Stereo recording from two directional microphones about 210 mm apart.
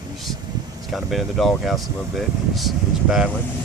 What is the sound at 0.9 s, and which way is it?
Speech, centre (ahead or behind).